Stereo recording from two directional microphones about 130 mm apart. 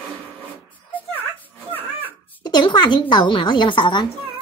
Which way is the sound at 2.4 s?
35° left (ahead or behind).